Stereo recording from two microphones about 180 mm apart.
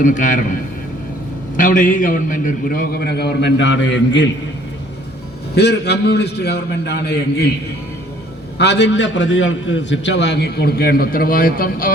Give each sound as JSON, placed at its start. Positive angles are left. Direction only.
{"t": 0.0, "sound": "a man's voice", "side_deg": 45}
{"t": 1.5, "sound": "a man's voice", "side_deg": 50}
{"t": 5.5, "sound": "a man's voice", "side_deg": 65}
{"t": 8.5, "sound": "a man's voice", "side_deg": 70}